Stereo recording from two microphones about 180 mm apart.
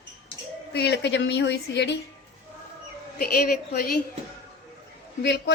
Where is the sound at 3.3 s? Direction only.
55° left (ahead or behind).